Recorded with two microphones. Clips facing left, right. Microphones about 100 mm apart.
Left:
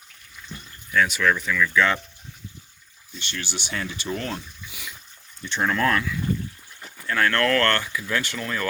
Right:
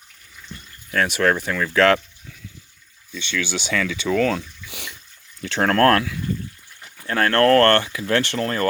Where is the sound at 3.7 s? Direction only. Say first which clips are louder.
Right 8 dB; 90° right.